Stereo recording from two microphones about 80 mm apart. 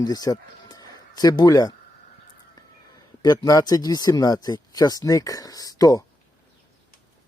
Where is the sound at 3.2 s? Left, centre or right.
Left.